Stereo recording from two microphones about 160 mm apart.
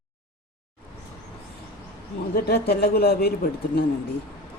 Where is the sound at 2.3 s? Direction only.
75° left (ahead or behind).